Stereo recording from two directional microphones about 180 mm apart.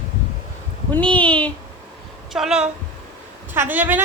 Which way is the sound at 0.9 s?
5° left (ahead or behind).